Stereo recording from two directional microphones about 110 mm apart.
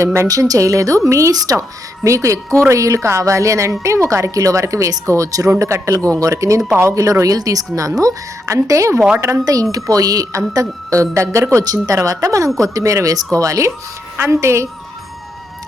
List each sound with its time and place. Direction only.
0.0 s a woman's voice: 25° right (ahead or behind)